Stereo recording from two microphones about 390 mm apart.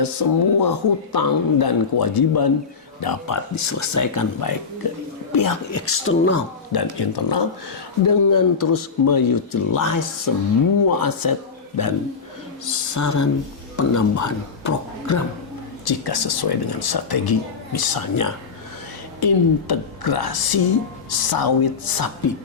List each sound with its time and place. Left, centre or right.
0.0 s a woman's voice: left
5.7 s speech: left
6.7 s speech: left
8.0 s a woman's voice: left
12.6 s speech: left
15.8 s a woman's voice: left